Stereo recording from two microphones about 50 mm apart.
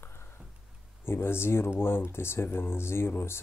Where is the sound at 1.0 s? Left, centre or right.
Left.